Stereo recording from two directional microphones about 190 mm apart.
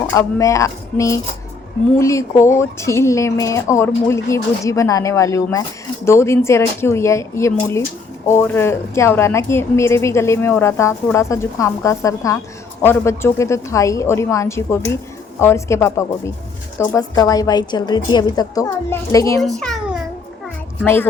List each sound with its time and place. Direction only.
0.1 s a woman's voice: 15° left (ahead or behind)
19.4 s cat: centre (ahead or behind)
20.8 s a woman's voice: 10° left (ahead or behind)